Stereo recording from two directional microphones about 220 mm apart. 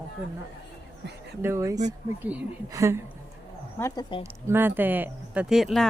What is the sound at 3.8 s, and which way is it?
Speech, 20° left (ahead or behind).